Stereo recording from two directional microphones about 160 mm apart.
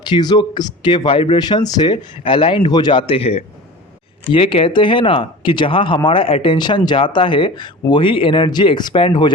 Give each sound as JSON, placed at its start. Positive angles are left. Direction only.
{"t": 0.0, "sound": "speech", "side_deg": 25}